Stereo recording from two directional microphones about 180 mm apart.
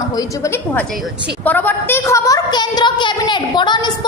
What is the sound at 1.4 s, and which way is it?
A woman's voice, 10° left (ahead or behind).